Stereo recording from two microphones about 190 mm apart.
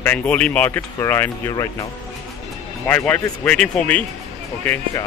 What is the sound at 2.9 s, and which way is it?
A man's voice, 10° left (ahead or behind).